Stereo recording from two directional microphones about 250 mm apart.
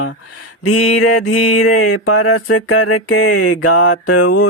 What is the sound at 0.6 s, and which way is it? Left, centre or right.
Mantra, left.